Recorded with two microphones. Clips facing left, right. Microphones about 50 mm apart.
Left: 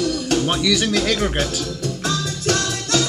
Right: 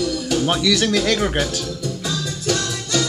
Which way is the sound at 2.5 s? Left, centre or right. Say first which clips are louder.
Left 2 dB; left.